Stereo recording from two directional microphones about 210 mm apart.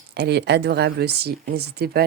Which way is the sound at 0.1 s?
50° right (ahead or behind).